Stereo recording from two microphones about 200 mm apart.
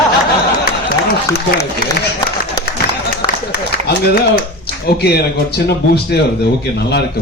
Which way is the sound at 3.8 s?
55° left (ahead or behind).